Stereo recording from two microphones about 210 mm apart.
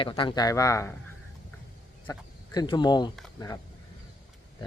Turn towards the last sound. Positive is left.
turn(degrees=15)  # may be behind; listen again after turning